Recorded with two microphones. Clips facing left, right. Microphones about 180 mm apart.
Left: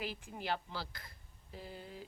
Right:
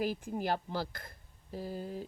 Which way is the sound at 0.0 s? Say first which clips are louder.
Right 9 dB; 45° right (ahead or behind).